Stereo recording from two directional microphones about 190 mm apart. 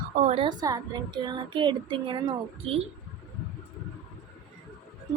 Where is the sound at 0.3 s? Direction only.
25° right (ahead or behind).